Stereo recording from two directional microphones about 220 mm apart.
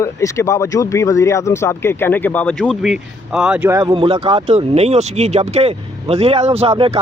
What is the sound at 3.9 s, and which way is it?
Speech, 25° right (ahead or behind).